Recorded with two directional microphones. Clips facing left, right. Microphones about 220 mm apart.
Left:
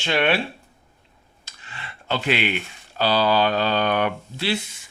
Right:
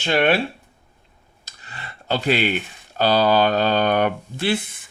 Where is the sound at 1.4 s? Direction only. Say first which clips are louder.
Right 1 dB; 40° right (ahead or behind).